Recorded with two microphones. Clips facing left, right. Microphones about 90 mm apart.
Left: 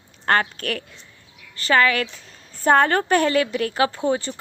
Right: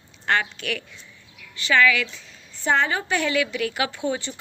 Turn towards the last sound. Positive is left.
turn(degrees=40)  # may be behind; listen again after turning